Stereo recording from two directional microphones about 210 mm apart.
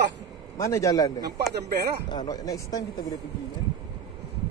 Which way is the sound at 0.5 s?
15° left (ahead or behind).